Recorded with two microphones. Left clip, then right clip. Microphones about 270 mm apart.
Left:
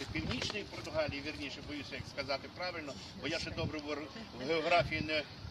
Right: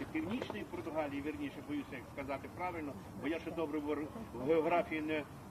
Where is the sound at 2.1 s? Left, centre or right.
Left.